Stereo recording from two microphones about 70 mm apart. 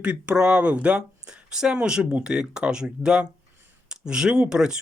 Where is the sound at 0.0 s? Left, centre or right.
Centre.